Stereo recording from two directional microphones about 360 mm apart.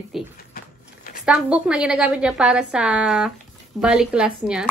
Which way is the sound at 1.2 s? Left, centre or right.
Centre.